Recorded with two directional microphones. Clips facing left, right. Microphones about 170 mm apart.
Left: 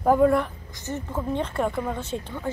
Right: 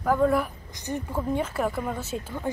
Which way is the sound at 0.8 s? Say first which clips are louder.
Even; 10° right (ahead or behind).